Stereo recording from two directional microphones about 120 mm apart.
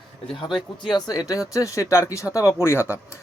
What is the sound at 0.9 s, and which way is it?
Speech, 30° left (ahead or behind).